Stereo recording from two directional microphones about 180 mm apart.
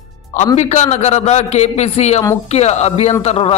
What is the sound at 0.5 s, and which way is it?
A man's voice, 40° left (ahead or behind).